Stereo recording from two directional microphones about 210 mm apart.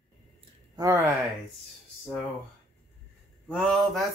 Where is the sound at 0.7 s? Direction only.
15° right (ahead or behind).